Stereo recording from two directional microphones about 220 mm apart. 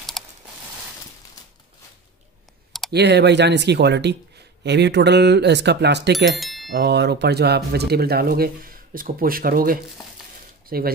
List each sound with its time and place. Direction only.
0.2 s a sound: centre (ahead or behind)
2.9 s speech: 50° right (ahead or behind)
6.4 s bicycle bell: centre (ahead or behind)
6.7 s speech: 50° right (ahead or behind)